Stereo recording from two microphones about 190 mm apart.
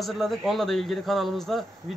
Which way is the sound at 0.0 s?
Centre (ahead or behind).